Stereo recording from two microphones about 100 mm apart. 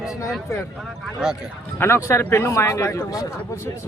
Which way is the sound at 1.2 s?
5° right (ahead or behind).